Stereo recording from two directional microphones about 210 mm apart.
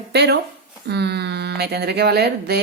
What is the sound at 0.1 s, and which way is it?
Speech, 50° right (ahead or behind).